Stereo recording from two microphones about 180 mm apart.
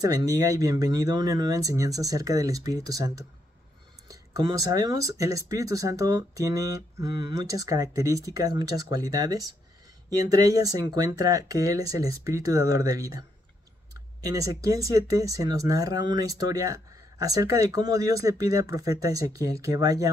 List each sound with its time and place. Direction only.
0.0 s speech: 20° right (ahead or behind)
14.2 s speech: 20° right (ahead or behind)